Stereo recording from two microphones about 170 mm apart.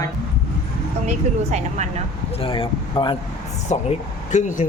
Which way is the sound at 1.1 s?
40° right (ahead or behind).